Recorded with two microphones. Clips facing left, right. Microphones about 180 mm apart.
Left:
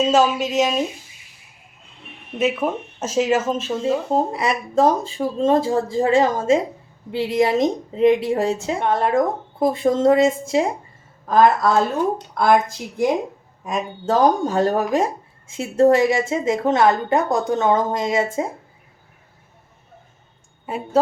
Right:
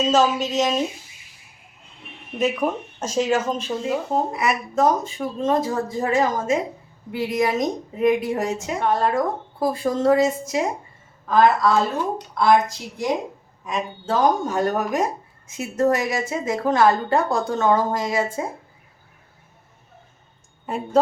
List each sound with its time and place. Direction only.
0.0 s speech: centre (ahead or behind)
2.4 s speech: 5° left (ahead or behind)
3.8 s a woman's voice: 30° left (ahead or behind)
11.3 s a woman's voice: 45° left (ahead or behind)
13.7 s a woman's voice: 40° left (ahead or behind); by 18.4 s 25° left (ahead or behind)
20.7 s speech: 5° left (ahead or behind)